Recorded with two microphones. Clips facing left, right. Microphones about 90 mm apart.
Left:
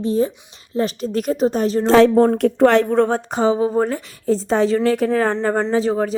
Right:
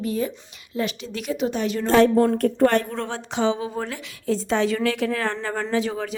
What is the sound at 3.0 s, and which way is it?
Speech, 45° left (ahead or behind).